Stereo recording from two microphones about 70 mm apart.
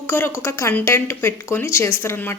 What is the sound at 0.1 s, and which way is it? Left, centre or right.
A woman's voice, left.